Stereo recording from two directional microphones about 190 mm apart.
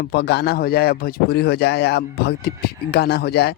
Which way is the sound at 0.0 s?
60° left (ahead or behind).